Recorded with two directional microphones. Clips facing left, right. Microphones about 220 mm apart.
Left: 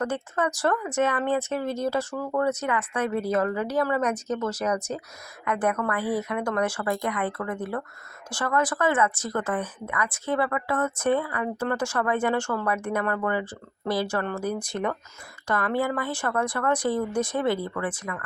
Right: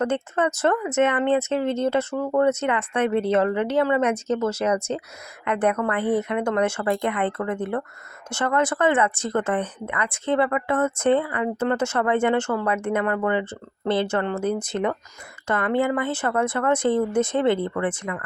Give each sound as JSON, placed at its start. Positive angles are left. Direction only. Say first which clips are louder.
{"t": 0.0, "sound": "speech", "louder": "right 4 dB", "side_deg": -25}